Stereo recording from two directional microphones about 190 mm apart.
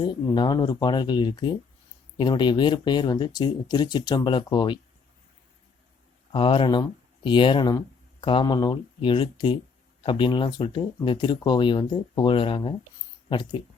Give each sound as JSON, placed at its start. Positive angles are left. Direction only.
{"t": 0.0, "sound": "speech", "side_deg": 20}
{"t": 6.3, "sound": "speech", "side_deg": 25}